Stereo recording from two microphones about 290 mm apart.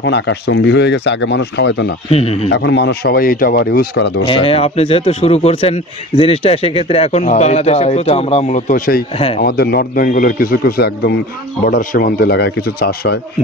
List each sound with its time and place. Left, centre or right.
0.0 s speech: left
2.0 s speech: left
2.5 s speech: left
4.3 s speech: centre